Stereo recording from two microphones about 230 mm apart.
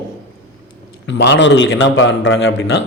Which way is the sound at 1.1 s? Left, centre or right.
Left.